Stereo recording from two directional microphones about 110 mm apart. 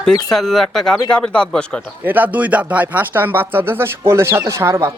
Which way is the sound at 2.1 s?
15° right (ahead or behind).